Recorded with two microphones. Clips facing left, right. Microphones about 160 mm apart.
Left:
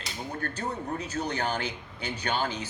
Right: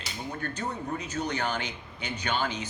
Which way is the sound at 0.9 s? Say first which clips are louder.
Even; 35° left (ahead or behind).